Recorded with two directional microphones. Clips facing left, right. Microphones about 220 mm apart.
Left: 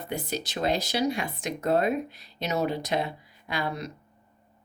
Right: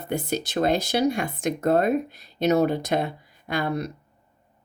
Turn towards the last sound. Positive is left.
turn(degrees=-55)  # may be behind; listen again after turning